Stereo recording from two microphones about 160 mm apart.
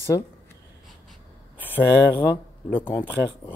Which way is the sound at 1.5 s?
10° left (ahead or behind).